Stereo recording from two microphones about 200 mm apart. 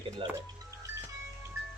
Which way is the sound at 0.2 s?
25° right (ahead or behind).